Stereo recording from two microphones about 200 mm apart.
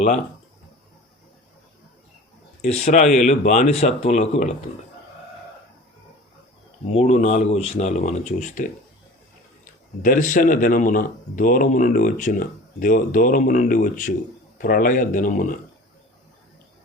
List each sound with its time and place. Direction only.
2.6 s speech: 35° left (ahead or behind)
6.8 s speech: 35° left (ahead or behind)
10.0 s speech: 40° left (ahead or behind)